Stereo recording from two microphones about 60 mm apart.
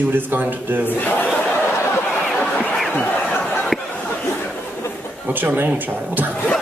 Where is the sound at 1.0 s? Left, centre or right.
Left.